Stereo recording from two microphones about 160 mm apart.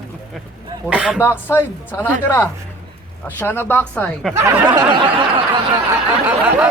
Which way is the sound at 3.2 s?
15° left (ahead or behind).